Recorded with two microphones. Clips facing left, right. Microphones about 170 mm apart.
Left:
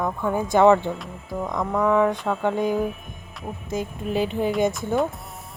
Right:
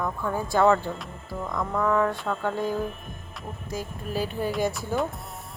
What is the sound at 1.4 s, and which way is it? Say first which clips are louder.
Music: left 4 dB; 15° left (ahead or behind).